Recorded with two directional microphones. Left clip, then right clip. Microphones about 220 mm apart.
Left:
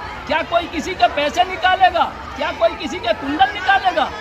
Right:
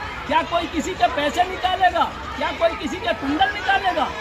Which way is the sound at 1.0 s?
15° left (ahead or behind).